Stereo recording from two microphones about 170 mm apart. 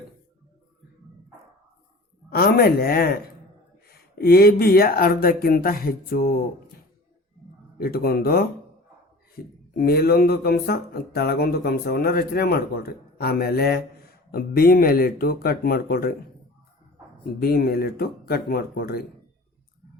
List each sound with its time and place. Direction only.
2.3 s speech: 65° left (ahead or behind)
7.8 s speech: 65° left (ahead or behind)
9.7 s speech: 65° left (ahead or behind)
17.4 s speech: 65° left (ahead or behind)